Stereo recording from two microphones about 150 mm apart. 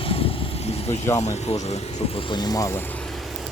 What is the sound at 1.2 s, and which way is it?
Speech, 45° left (ahead or behind).